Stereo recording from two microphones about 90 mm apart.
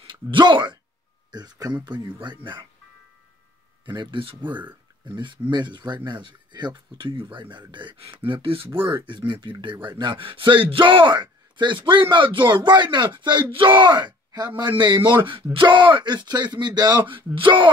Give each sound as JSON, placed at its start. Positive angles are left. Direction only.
{"t": 0.0, "sound": "speech", "side_deg": -60}
{"t": 3.8, "sound": "speech", "side_deg": -60}
{"t": 8.3, "sound": "speech", "side_deg": -80}
{"t": 9.0, "sound": "speech", "side_deg": -60}